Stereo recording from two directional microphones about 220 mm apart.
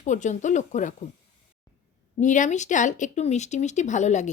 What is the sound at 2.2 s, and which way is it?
Speech, 35° left (ahead or behind).